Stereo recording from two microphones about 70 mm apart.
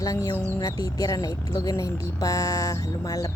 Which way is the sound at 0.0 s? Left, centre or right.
Left.